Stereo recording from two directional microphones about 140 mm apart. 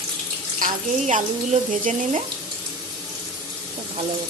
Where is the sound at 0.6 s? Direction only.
60° right (ahead or behind).